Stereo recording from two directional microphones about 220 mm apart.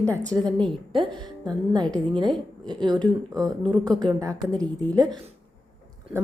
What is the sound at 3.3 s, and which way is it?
Speech, 15° right (ahead or behind).